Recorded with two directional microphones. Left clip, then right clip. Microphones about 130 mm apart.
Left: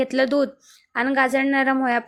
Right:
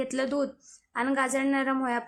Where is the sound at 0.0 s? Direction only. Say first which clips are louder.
Left 9 dB; 30° left (ahead or behind).